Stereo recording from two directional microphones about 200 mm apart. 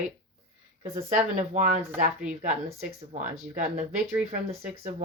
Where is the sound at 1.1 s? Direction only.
35° right (ahead or behind).